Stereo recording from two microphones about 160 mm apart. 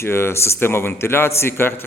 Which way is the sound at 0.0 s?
15° left (ahead or behind).